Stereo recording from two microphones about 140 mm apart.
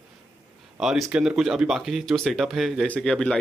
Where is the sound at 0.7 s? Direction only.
5° right (ahead or behind).